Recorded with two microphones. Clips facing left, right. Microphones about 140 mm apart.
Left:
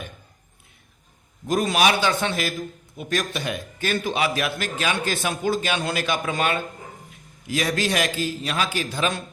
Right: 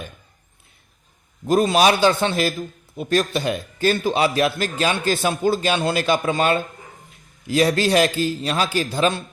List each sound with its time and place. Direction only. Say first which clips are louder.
1.5 s a man's voice: right 4 dB; 30° right (ahead or behind)